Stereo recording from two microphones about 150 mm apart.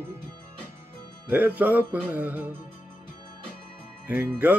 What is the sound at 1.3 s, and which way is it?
Music, 10° right (ahead or behind).